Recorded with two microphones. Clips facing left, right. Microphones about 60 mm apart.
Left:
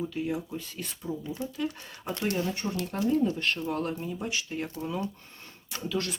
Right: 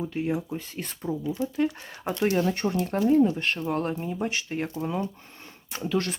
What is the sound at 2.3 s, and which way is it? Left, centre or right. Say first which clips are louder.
Speech: right 6 dB; right.